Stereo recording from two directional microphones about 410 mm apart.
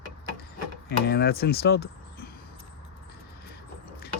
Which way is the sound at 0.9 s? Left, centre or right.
Left.